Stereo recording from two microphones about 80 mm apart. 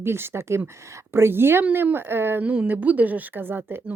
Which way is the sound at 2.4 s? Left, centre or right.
Centre.